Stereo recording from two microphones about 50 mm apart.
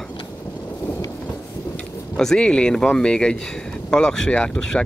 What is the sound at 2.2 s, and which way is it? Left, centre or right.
Speech, centre.